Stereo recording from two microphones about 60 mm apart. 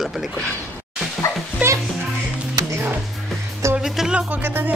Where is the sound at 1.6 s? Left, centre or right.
Right.